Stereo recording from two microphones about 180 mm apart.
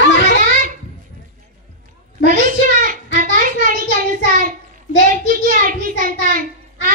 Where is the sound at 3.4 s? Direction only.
50° right (ahead or behind).